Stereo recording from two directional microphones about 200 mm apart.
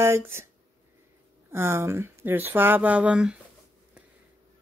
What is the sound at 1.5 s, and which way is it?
Speech, 10° right (ahead or behind).